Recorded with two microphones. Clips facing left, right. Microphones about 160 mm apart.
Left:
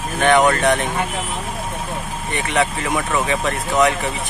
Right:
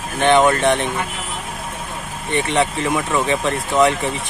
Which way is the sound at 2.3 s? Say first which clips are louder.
Right 2 dB; 30° right (ahead or behind).